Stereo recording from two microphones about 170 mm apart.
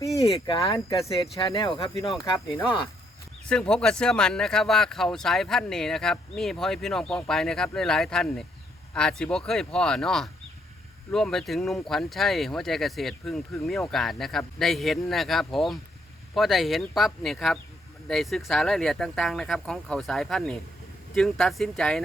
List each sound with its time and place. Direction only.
0.2 s speech: 30° left (ahead or behind)
1.5 s speech: 30° left (ahead or behind)
3.5 s speech: 5° left (ahead or behind)